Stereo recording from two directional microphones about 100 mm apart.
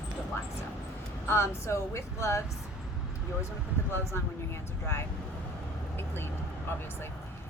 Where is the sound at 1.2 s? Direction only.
25° left (ahead or behind).